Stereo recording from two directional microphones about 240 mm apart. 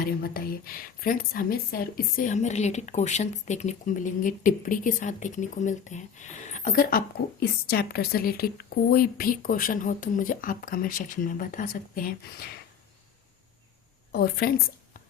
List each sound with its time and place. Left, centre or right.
0.0 s speech: left
14.1 s speech: left